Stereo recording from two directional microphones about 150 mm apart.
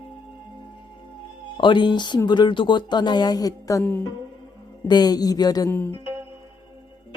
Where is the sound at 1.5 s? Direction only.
30° left (ahead or behind).